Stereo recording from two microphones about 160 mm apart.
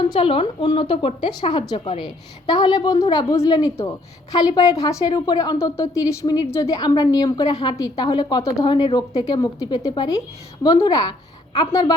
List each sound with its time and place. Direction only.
0.0 s a woman's voice: 35° left (ahead or behind)